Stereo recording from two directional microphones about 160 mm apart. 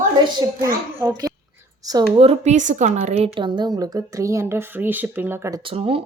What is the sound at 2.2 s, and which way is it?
A woman's voice, 40° right (ahead or behind).